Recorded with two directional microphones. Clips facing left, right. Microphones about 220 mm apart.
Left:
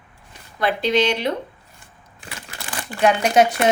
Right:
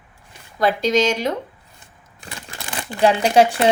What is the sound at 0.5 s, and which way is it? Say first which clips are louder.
Speech: right 2 dB; 40° right (ahead or behind).